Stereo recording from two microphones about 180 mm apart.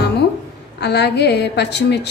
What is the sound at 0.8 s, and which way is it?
A woman's voice, 70° left (ahead or behind).